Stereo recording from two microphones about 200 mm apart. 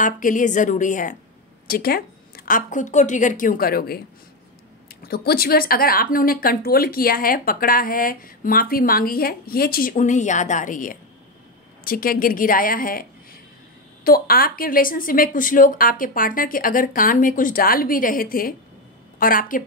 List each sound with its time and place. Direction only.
0.0 s a woman's voice: 40° left (ahead or behind)